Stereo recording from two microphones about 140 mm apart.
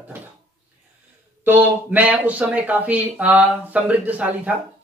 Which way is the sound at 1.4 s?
15° right (ahead or behind).